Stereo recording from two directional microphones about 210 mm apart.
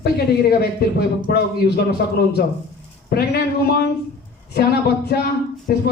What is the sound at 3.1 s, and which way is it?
Speech, 50° left (ahead or behind).